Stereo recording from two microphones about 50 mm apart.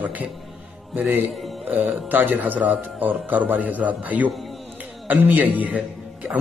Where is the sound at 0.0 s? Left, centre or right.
Right.